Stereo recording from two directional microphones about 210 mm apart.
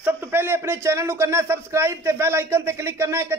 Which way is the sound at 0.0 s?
10° right (ahead or behind).